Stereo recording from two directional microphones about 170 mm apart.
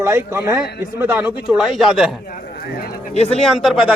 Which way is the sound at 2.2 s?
60° left (ahead or behind).